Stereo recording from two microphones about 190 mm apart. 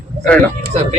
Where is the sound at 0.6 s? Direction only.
40° right (ahead or behind).